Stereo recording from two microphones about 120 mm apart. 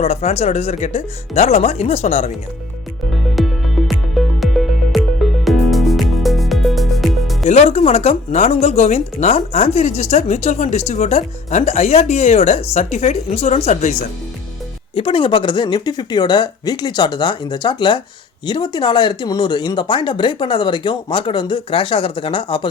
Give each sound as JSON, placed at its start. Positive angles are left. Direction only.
{"t": 0.0, "sound": "speech", "side_deg": 60}
{"t": 3.3, "sound": "music", "side_deg": 0}
{"t": 7.4, "sound": "speech", "side_deg": 65}
{"t": 14.9, "sound": "speech", "side_deg": 45}